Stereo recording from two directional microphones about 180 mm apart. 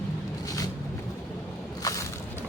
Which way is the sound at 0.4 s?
20° left (ahead or behind).